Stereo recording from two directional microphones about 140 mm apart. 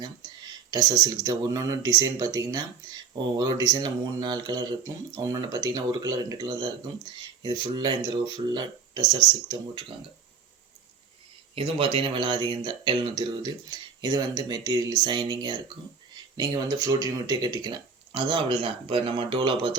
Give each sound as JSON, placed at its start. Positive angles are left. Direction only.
{"t": 0.7, "sound": "speech", "side_deg": -30}
{"t": 11.5, "sound": "speech", "side_deg": -40}